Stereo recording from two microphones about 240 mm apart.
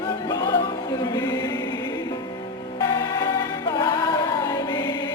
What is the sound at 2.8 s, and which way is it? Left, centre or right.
Music, centre.